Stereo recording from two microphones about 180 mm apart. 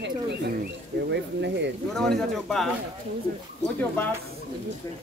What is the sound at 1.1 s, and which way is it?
Speech, 70° right (ahead or behind).